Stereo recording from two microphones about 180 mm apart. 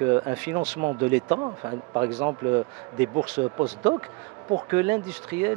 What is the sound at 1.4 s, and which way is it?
Speech, 25° right (ahead or behind).